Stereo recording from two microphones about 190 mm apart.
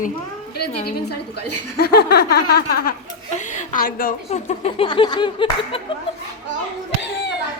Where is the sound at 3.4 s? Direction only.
40° left (ahead or behind).